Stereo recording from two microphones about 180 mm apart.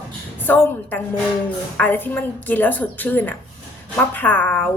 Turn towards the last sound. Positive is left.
turn(degrees=10)  # may be behind; listen again after turning